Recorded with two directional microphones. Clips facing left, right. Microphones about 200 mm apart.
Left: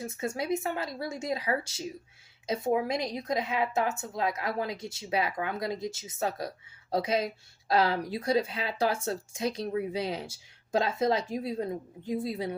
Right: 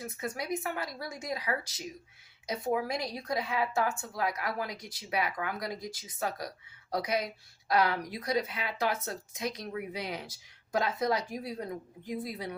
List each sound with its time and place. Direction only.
0.0 s speech: 25° left (ahead or behind)